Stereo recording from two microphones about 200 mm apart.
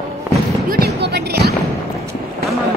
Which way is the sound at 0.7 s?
55° right (ahead or behind).